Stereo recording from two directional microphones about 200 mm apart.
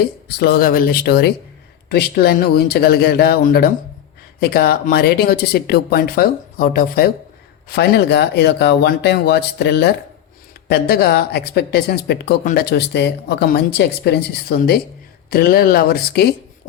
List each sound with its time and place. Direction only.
0.0 s speech: 50° left (ahead or behind)